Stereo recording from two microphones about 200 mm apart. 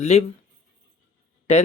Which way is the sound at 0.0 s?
35° left (ahead or behind).